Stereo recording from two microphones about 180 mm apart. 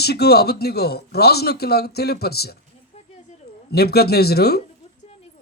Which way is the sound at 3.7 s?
60° left (ahead or behind).